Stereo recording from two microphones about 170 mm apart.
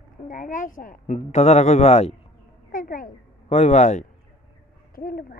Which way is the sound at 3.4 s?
40° left (ahead or behind).